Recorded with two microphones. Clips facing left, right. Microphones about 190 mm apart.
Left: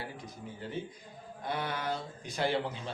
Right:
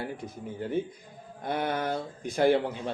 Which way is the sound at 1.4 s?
50° right (ahead or behind).